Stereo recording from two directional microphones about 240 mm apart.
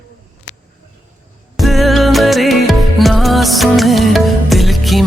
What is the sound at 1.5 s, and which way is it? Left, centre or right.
Music, centre.